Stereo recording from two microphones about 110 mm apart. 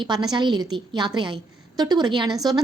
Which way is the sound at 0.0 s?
40° right (ahead or behind).